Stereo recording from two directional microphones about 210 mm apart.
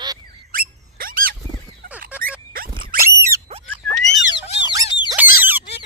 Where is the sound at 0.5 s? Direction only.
45° right (ahead or behind).